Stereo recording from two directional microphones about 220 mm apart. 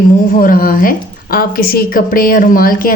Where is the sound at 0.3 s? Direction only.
40° left (ahead or behind).